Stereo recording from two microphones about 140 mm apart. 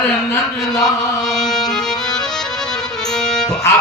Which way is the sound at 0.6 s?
5° left (ahead or behind).